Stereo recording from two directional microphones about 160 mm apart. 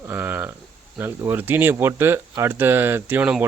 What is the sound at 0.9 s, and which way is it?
Speech, 15° right (ahead or behind).